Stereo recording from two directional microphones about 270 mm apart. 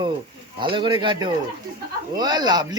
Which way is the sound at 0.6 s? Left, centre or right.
Centre.